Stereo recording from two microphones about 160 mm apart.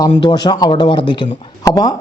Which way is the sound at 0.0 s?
25° left (ahead or behind).